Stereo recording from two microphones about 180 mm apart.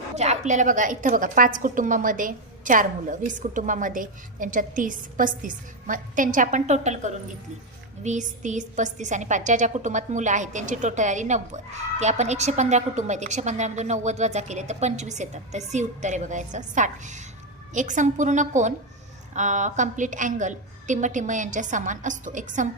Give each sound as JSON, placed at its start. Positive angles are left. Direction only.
{"t": 0.2, "sound": "a woman's voice", "side_deg": -40}